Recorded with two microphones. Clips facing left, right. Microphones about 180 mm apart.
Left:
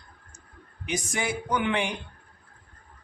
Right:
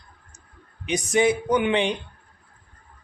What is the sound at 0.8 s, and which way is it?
Speech, 20° right (ahead or behind).